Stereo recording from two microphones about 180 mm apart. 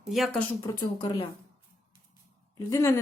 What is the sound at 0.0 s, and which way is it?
Speech, centre (ahead or behind).